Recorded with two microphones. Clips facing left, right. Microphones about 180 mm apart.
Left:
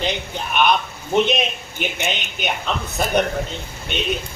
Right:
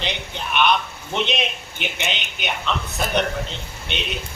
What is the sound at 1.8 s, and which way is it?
Speech, 45° left (ahead or behind).